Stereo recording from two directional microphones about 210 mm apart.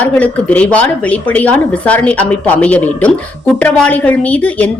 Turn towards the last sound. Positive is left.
turn(degrees=5)  # may be behind; listen again after turning